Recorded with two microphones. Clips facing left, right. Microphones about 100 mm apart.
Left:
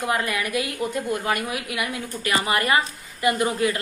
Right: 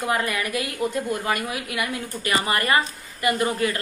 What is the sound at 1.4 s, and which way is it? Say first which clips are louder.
A woman's voice: even; 10° left (ahead or behind).